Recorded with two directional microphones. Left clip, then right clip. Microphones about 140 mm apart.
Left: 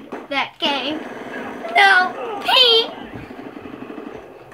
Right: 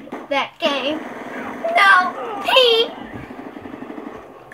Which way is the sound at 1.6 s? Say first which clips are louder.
Even; 5° left (ahead or behind).